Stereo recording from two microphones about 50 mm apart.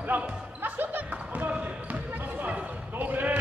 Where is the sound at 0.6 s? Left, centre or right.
Right.